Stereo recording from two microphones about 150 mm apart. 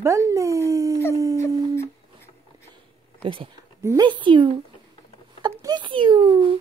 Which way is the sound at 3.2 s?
35° right (ahead or behind).